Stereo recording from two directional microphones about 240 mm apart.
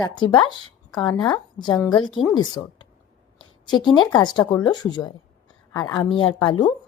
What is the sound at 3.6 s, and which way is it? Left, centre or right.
A woman's voice, centre.